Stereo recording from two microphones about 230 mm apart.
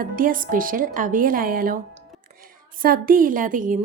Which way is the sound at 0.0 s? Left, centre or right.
Right.